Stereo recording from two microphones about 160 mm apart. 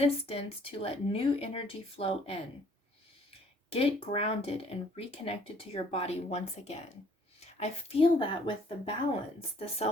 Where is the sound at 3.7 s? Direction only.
35° left (ahead or behind).